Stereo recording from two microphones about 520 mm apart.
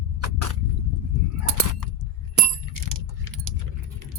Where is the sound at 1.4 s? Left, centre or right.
Right.